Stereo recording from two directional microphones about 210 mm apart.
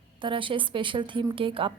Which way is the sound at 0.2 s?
25° right (ahead or behind).